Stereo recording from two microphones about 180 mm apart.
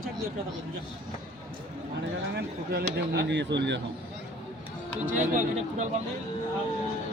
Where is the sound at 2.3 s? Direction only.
65° right (ahead or behind).